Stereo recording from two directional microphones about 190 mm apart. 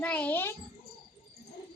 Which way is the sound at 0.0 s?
10° left (ahead or behind).